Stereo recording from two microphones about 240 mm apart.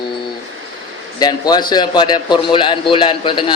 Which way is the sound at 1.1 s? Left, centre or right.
Centre.